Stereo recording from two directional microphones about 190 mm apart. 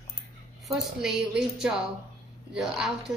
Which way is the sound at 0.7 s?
Centre (ahead or behind).